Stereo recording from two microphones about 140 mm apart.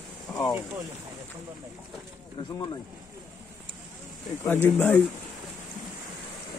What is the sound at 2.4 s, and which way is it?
Speech, 35° left (ahead or behind).